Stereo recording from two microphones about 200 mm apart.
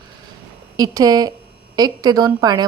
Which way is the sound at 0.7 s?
20° right (ahead or behind).